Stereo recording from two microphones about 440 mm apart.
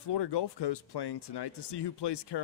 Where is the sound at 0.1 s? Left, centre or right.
Left.